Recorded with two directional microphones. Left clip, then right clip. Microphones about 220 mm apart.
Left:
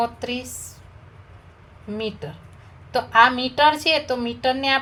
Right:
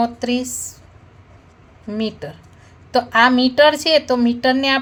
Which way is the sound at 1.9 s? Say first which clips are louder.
Right 4 dB; 25° right (ahead or behind).